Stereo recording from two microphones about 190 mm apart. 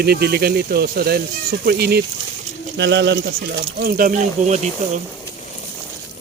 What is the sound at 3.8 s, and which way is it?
Speech, 50° right (ahead or behind).